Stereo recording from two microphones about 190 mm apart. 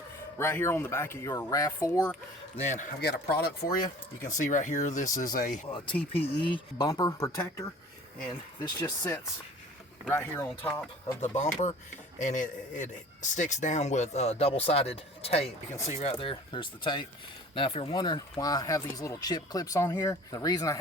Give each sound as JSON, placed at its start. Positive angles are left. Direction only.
{"t": 0.3, "sound": "speech", "side_deg": 15}
{"t": 3.0, "sound": "speech", "side_deg": 55}
{"t": 4.2, "sound": "a man's voice", "side_deg": 40}
{"t": 5.7, "sound": "speech", "side_deg": 25}
{"t": 11.2, "sound": "a man's voice", "side_deg": 40}